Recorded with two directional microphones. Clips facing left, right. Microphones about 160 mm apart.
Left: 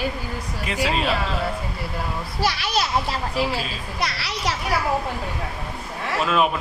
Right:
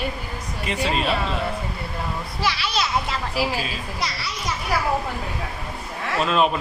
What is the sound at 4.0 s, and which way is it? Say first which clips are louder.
Speech: left 5 dB; 65° left (ahead or behind).